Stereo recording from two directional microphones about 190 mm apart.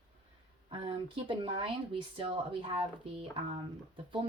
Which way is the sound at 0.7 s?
25° right (ahead or behind).